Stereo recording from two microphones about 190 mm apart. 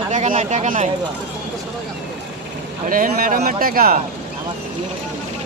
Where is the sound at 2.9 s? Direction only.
45° right (ahead or behind).